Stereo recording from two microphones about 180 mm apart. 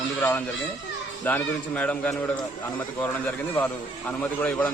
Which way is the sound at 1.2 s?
10° left (ahead or behind).